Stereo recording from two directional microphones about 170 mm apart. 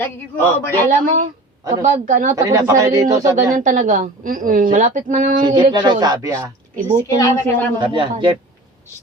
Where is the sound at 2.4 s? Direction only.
20° right (ahead or behind).